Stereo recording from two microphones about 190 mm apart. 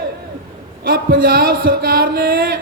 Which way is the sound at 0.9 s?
50° right (ahead or behind).